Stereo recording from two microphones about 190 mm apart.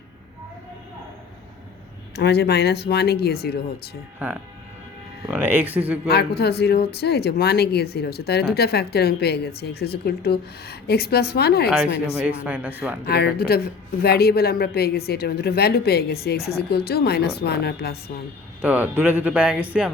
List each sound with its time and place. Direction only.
2.1 s speech: 60° left (ahead or behind)
5.3 s speech: 10° right (ahead or behind)
6.1 s speech: 55° left (ahead or behind)
12.2 s speech: 5° right (ahead or behind)
13.1 s speech: 55° left (ahead or behind)
18.6 s speech: 10° right (ahead or behind)